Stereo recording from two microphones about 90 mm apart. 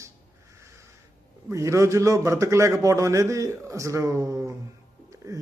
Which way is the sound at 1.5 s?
35° right (ahead or behind).